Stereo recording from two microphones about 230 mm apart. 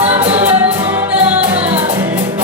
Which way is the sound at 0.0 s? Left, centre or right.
Right.